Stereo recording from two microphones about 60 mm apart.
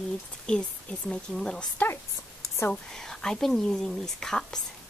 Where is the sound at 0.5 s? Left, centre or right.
Centre.